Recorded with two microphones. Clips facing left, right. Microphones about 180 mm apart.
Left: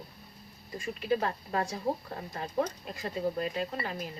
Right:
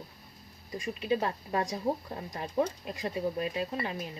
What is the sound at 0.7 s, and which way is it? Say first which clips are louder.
Speech: even; 15° right (ahead or behind).